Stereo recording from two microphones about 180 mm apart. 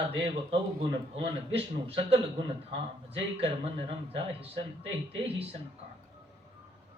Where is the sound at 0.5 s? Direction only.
30° right (ahead or behind).